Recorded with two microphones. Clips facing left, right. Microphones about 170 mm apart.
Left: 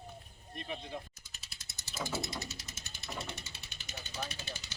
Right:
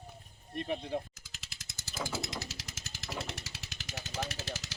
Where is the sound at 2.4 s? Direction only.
90° right.